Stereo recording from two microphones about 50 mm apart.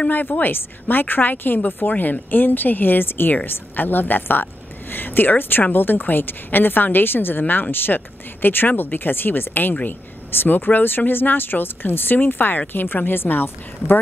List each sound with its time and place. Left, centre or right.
0.1 s a woman's voice: left